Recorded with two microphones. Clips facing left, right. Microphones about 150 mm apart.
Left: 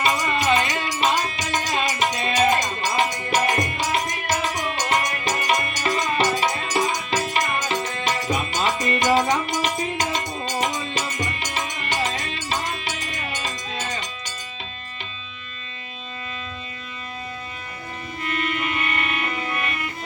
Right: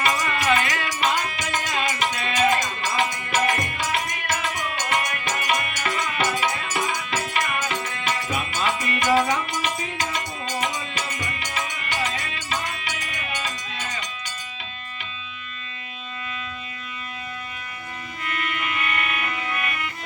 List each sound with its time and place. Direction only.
0.0 s music: 20° left (ahead or behind)
18.2 s music: 30° left (ahead or behind)